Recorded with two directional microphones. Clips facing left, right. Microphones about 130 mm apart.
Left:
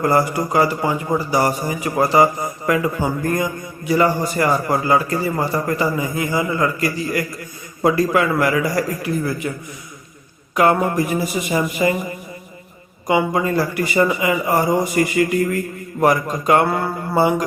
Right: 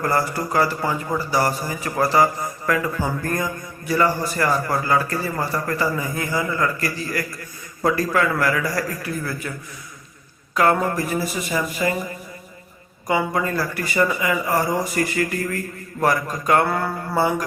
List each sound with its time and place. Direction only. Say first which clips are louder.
0.0 s a man's voice: left 5 dB; 20° left (ahead or behind)
10.5 s a man's voice: left 3 dB; 20° left (ahead or behind)
13.1 s a man's voice: left 4 dB; 20° left (ahead or behind)
17.2 s a man's voice: left 4 dB; 25° left (ahead or behind)